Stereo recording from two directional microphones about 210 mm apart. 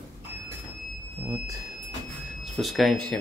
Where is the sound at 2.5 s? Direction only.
Centre (ahead or behind).